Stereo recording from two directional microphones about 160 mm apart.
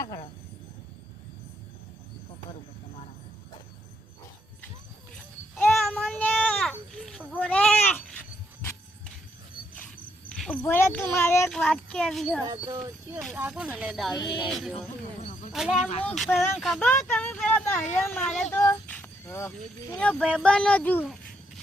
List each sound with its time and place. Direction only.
5.1 s child singing: 10° left (ahead or behind)
10.3 s a child's voice: 5° left (ahead or behind)
11.4 s speech: centre (ahead or behind)
12.5 s speech: 25° right (ahead or behind)
13.2 s speech: 5° right (ahead or behind)
14.2 s music: 30° left (ahead or behind)
14.4 s speech: centre (ahead or behind)
16.9 s speech: 15° left (ahead or behind)
18.9 s female singing: 10° left (ahead or behind)
20.0 s speech: 5° left (ahead or behind)